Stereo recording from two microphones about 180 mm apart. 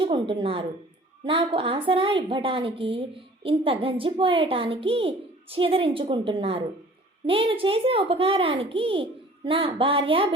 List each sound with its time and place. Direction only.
0.0 s a woman's voice: 25° right (ahead or behind)